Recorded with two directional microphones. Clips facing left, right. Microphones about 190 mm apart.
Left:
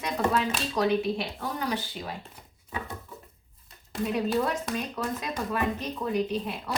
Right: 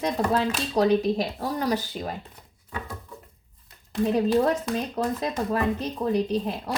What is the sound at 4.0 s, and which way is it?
A woman's voice, 35° right (ahead or behind).